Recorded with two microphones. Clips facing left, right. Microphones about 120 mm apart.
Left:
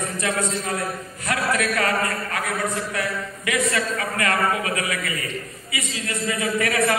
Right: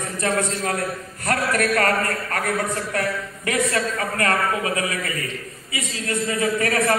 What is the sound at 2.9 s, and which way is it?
A man's voice, 40° right (ahead or behind).